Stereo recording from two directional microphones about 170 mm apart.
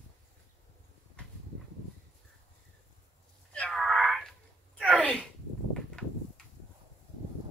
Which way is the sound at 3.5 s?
Centre (ahead or behind).